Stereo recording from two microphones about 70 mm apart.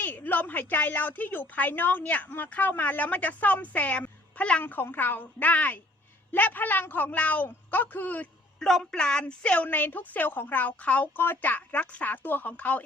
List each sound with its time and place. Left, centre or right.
0.0 s a woman's voice: left
4.6 s a woman's voice: left
8.5 s a woman's voice: centre